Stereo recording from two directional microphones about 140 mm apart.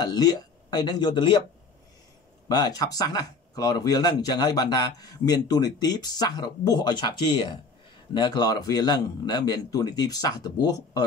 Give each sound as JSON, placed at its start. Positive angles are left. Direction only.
{"t": 0.0, "sound": "speech", "side_deg": 30}
{"t": 2.4, "sound": "speech", "side_deg": 25}